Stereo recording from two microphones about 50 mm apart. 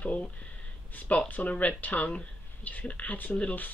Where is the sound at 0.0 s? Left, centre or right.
Left.